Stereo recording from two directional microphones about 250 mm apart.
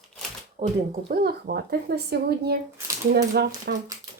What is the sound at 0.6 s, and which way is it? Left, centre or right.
Speech, right.